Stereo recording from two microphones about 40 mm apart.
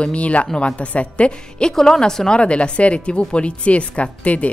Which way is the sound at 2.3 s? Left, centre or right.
Left.